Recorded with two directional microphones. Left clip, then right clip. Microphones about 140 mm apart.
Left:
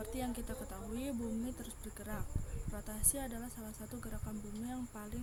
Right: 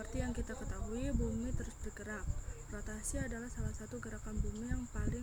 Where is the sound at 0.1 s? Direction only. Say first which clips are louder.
Left 1 dB; 35° left (ahead or behind).